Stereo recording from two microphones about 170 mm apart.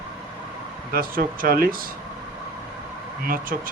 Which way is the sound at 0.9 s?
55° right (ahead or behind).